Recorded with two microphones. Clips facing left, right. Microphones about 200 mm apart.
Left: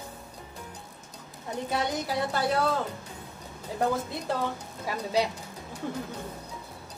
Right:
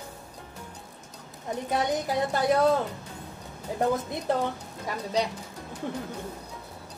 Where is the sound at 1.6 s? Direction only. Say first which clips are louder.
Right 3 dB; 15° right (ahead or behind).